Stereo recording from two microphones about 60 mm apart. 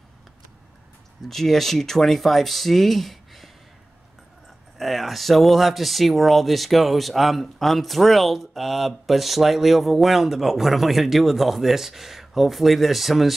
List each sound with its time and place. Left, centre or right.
1.2 s speech: centre
4.7 s speech: centre